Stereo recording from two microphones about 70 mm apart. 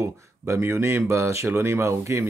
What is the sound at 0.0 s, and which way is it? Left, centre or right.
Speech, right.